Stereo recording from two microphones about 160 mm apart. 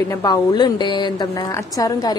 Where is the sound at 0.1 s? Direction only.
25° left (ahead or behind).